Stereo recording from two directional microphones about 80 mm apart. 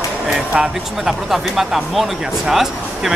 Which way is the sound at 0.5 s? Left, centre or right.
Centre.